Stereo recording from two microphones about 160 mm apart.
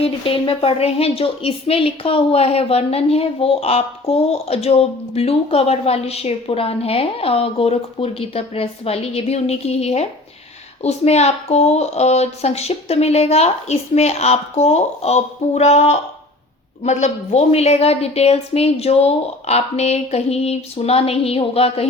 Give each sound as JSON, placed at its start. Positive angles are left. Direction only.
{"t": 0.0, "sound": "a woman's voice", "side_deg": 35}